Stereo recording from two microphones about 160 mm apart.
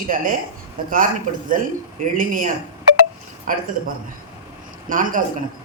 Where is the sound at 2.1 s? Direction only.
55° right (ahead or behind).